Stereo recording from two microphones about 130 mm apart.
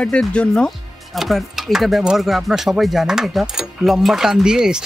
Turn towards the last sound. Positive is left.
turn(degrees=-5)  # may be behind; listen again after turning